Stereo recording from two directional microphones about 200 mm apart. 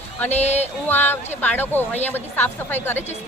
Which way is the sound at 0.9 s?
10° left (ahead or behind).